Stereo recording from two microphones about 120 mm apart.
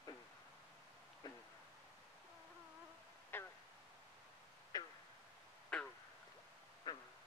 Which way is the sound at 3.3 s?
15° left (ahead or behind).